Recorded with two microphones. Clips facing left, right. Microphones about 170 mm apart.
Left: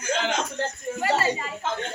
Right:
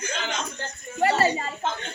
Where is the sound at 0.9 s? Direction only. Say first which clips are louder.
Right 3 dB; 40° right (ahead or behind).